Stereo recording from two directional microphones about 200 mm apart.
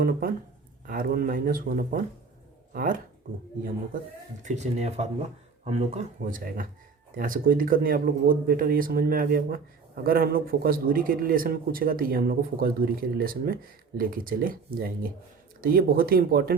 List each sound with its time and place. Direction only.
0.0 s speech: 45° right (ahead or behind)
4.4 s speech: 35° right (ahead or behind)